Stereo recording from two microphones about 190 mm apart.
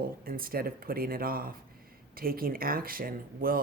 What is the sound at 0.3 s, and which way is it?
Speech, 50° right (ahead or behind).